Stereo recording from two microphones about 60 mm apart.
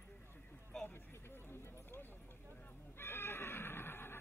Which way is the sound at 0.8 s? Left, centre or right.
Left.